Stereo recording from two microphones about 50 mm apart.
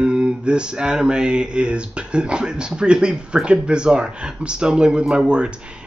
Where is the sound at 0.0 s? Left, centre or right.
Centre.